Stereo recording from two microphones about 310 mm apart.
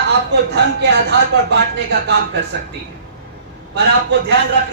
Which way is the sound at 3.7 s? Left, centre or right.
Right.